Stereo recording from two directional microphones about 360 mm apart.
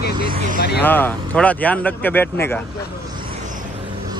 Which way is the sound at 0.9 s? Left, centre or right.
Centre.